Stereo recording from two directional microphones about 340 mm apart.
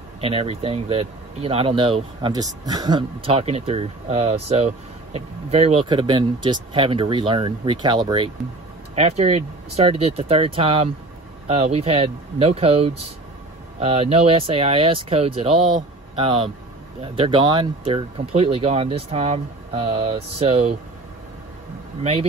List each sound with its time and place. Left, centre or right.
0.2 s speech: centre